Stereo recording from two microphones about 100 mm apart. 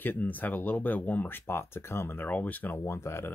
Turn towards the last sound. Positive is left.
turn(degrees=25)  # may be behind; listen again after turning